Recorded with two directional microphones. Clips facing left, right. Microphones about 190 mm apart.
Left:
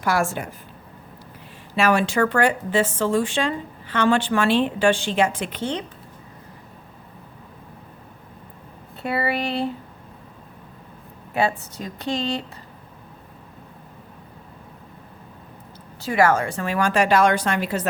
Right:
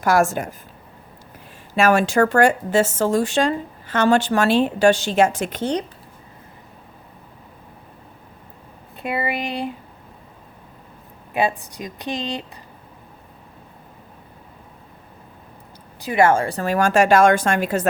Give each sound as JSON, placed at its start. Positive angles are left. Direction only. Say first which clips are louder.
{"t": 0.0, "sound": "speech", "louder": "right 5 dB", "side_deg": -45}
{"t": 1.7, "sound": "speech", "louder": "right 3 dB", "side_deg": -45}
{"t": 9.0, "sound": "a woman's voice", "louder": "left 1 dB", "side_deg": -15}
{"t": 11.3, "sound": "a woman's voice", "louder": "right 1 dB", "side_deg": -15}
{"t": 16.0, "sound": "speech", "louder": "right 2 dB", "side_deg": -20}